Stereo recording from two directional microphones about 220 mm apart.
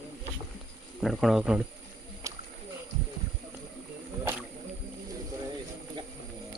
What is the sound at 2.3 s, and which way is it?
Rowboat, 15° right (ahead or behind).